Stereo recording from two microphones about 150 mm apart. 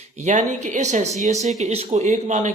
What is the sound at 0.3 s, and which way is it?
A man's voice, 55° right (ahead or behind).